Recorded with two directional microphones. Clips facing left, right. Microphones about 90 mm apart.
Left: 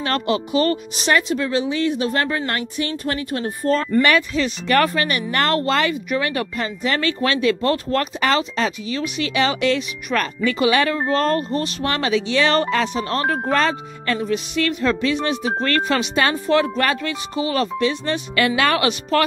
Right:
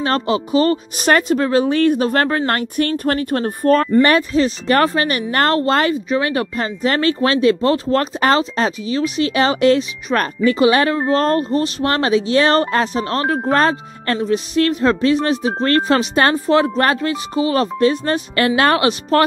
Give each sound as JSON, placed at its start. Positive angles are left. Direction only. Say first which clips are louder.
{"t": 0.0, "sound": "speech", "louder": "right 3 dB", "side_deg": -35}
{"t": 0.9, "sound": "speech", "louder": "right 5 dB", "side_deg": -50}
{"t": 4.0, "sound": "speech", "louder": "right 4 dB", "side_deg": -35}